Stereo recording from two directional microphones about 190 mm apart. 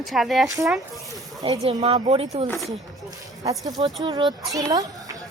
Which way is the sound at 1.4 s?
35° right (ahead or behind).